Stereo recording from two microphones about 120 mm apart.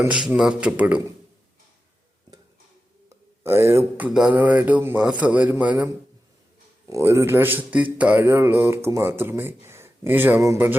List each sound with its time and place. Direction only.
0.1 s speech: 10° right (ahead or behind)
3.4 s speech: 20° right (ahead or behind)
6.8 s speech: 25° right (ahead or behind)